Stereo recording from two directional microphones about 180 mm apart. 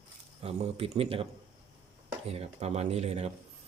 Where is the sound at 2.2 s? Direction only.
35° right (ahead or behind).